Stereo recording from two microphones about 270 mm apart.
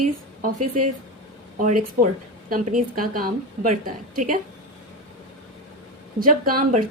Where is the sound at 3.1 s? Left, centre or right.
Right.